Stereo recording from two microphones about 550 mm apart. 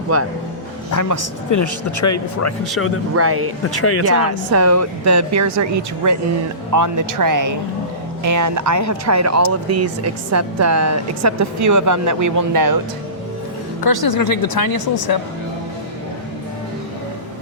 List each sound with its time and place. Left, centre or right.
0.1 s a woman's voice: right
0.9 s speech: left
3.2 s a woman's voice: right
3.7 s speech: left
4.0 s a woman's voice: right
13.8 s speech: left